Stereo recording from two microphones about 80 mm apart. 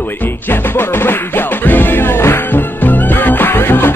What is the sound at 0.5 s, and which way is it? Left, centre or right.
Music, left.